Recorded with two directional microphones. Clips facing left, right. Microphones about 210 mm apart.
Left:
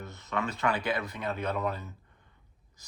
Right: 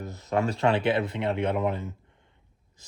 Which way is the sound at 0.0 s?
35° right (ahead or behind).